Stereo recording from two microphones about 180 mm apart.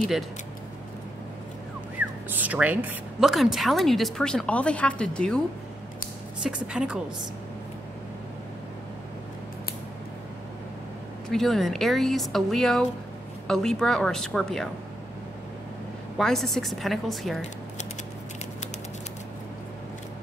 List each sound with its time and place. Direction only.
2.0 s speech: 10° right (ahead or behind)
6.4 s speech: 5° right (ahead or behind)
11.2 s speech: centre (ahead or behind)
16.2 s speech: centre (ahead or behind)